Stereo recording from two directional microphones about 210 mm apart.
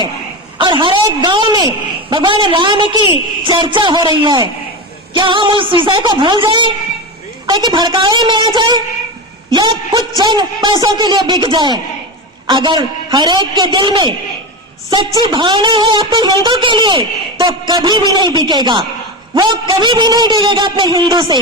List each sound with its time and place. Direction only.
0.6 s a man's voice: 20° right (ahead or behind)